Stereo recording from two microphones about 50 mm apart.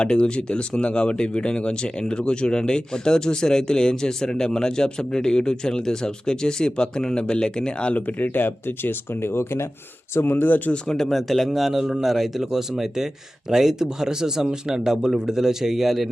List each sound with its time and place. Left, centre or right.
0.0 s speech: centre
8.0 s speech: left
10.8 s speech: centre